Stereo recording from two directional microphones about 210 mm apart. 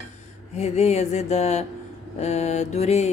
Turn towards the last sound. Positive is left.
turn(degrees=30)  # may be behind; listen again after turning